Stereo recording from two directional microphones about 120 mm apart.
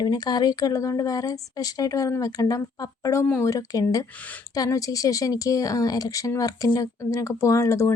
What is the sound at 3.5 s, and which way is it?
A woman's voice, 30° left (ahead or behind).